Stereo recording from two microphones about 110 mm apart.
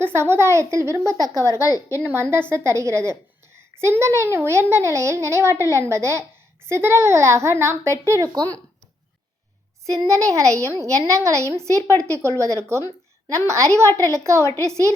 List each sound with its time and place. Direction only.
0.0 s a woman's voice: 20° right (ahead or behind)
9.8 s a woman's voice: 30° right (ahead or behind)